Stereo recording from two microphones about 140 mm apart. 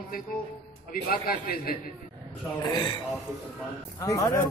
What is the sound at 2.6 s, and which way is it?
A man's voice, 30° left (ahead or behind).